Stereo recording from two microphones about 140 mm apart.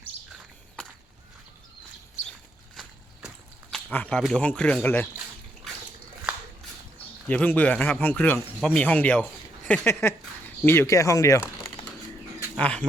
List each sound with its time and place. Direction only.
3.7 s a sound: 10° left (ahead or behind)
4.2 s speech: 5° left (ahead or behind)
7.3 s speech: 10° left (ahead or behind)
12.5 s speech: 10° left (ahead or behind)